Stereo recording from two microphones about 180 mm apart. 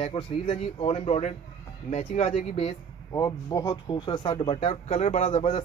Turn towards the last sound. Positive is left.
turn(degrees=35)  # may be behind; listen again after turning